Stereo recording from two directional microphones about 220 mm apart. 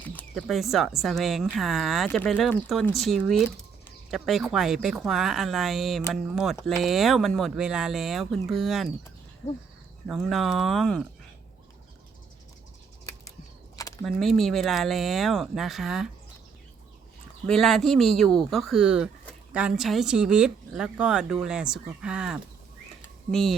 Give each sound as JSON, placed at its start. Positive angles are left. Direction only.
{"t": 0.0, "sound": "speech", "side_deg": 5}
{"t": 10.1, "sound": "speech", "side_deg": 0}
{"t": 13.7, "sound": "a sound", "side_deg": 15}
{"t": 14.0, "sound": "speech", "side_deg": 0}
{"t": 17.4, "sound": "speech", "side_deg": 0}